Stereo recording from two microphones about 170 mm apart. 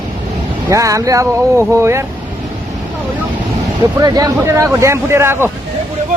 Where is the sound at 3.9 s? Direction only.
20° right (ahead or behind).